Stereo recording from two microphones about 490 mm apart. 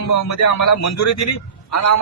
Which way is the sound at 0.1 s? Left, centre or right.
Left.